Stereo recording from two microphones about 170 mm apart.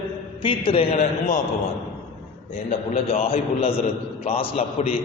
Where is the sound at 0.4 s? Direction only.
30° left (ahead or behind).